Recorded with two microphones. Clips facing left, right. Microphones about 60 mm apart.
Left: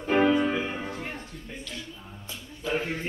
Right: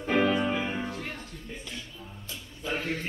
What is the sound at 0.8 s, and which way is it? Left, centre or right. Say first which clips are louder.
Music: left 1 dB; left.